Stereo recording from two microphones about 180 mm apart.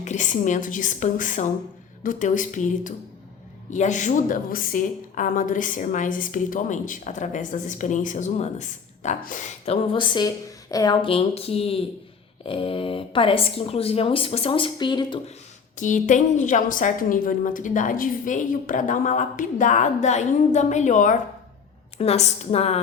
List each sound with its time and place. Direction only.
0.0 s a woman's voice: 40° left (ahead or behind)
9.8 s a woman's voice: 25° left (ahead or behind)
15.8 s a woman's voice: 45° left (ahead or behind)
21.9 s speech: 35° left (ahead or behind)